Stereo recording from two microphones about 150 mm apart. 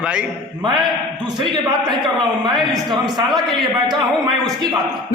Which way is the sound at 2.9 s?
30° right (ahead or behind).